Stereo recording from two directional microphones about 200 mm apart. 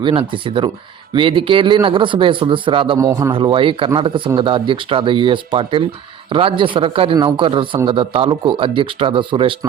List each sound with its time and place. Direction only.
0.0 s speech: 25° right (ahead or behind)
3.1 s a man's voice: 15° right (ahead or behind)
3.3 s speech: 25° right (ahead or behind)